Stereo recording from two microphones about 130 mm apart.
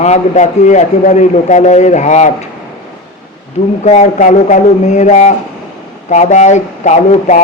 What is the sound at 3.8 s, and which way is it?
Speech, 60° left (ahead or behind).